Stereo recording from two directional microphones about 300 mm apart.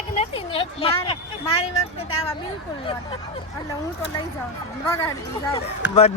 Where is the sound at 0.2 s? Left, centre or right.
Centre.